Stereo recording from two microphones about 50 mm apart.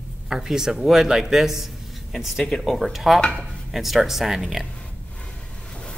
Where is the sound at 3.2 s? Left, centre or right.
Centre.